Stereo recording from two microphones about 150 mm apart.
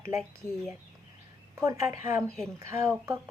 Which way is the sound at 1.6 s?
20° right (ahead or behind).